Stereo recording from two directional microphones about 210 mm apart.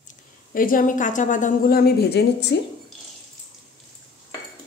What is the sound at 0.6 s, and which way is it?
A woman's voice, 40° left (ahead or behind).